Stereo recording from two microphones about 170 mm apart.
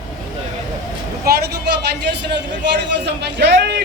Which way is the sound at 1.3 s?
75° right (ahead or behind).